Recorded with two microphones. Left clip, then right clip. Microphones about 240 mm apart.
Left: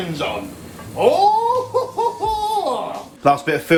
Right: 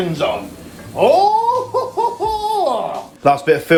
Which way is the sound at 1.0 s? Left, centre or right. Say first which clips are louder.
Right 2 dB; centre.